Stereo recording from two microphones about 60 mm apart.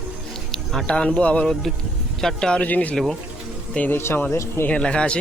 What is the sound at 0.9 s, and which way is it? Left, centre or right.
Speech, centre.